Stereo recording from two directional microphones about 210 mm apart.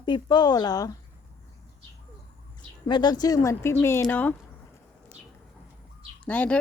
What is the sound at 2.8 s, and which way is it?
Speech, 20° left (ahead or behind).